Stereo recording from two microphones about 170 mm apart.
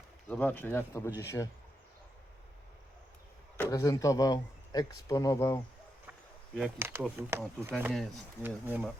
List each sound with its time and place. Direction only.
0.3 s speech: 10° left (ahead or behind)
3.7 s speech: 20° left (ahead or behind)
6.1 s a sound: centre (ahead or behind)
6.7 s speech: 15° right (ahead or behind)